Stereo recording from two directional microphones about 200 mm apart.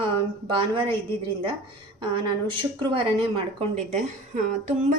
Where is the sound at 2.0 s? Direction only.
25° right (ahead or behind).